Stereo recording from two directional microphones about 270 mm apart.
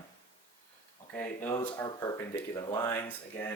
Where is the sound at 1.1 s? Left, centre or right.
Centre.